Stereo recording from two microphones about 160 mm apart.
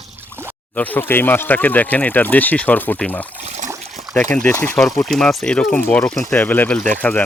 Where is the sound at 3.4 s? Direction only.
45° right (ahead or behind).